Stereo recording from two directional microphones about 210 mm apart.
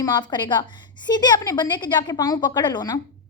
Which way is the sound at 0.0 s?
20° left (ahead or behind).